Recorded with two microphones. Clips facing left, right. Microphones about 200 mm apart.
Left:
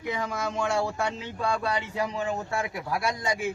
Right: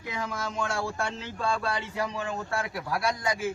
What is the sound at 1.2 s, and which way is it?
Speech, 15° left (ahead or behind).